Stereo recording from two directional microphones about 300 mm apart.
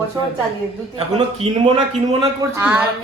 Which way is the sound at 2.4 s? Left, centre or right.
Centre.